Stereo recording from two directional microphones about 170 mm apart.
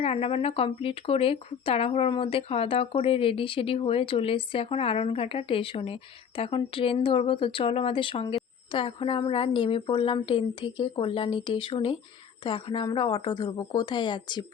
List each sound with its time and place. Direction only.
0.0 s a woman's voice: 35° left (ahead or behind)